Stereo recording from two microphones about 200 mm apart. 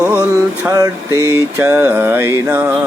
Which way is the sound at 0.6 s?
15° right (ahead or behind).